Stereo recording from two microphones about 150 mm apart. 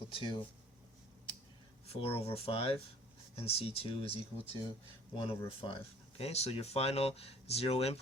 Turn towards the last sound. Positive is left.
turn(degrees=40)  # may be behind; listen again after turning